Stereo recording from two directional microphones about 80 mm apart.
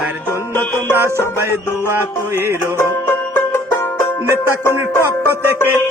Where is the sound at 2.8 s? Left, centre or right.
Left.